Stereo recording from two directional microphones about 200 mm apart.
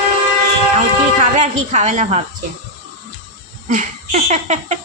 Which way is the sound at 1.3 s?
35° right (ahead or behind).